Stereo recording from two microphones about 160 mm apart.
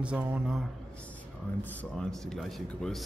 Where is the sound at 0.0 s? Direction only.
10° right (ahead or behind).